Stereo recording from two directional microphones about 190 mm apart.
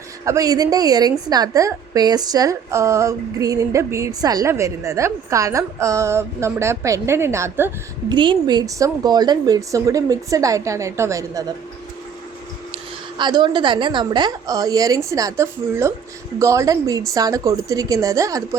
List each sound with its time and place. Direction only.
0.3 s a woman's voice: 20° right (ahead or behind)
8.1 s a woman's voice: 25° right (ahead or behind)
13.1 s a woman's voice: 25° right (ahead or behind)